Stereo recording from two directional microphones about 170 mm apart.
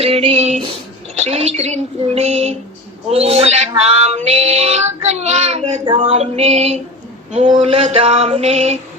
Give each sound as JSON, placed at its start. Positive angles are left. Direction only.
{"t": 0.0, "sound": "child singing", "side_deg": -35}